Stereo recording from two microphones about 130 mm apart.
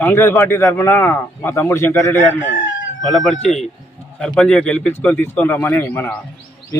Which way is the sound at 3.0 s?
Centre (ahead or behind).